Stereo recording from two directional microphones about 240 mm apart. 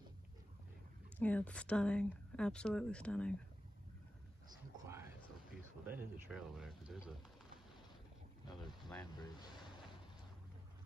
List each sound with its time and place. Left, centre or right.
1.1 s a woman's voice: centre
4.8 s a sound: centre
5.9 s a woman's voice: centre
9.0 s speech: centre